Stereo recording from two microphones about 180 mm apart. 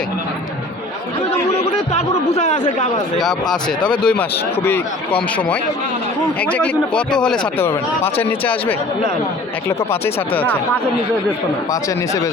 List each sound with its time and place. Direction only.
1.9 s speech: 35° left (ahead or behind)
3.2 s speech: centre (ahead or behind)
3.8 s speech: 25° left (ahead or behind)
4.0 s speech: 5° left (ahead or behind)
11.7 s speech: 15° left (ahead or behind)